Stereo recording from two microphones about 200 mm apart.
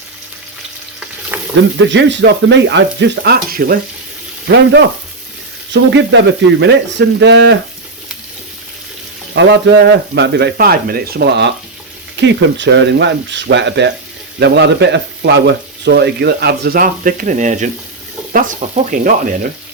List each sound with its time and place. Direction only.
1.3 s a sound: 10° right (ahead or behind)
1.8 s frying: 65° right (ahead or behind)
9.3 s frying: 55° right (ahead or behind); by 17.7 s 35° right (ahead or behind)
18.3 s speech: 40° right (ahead or behind)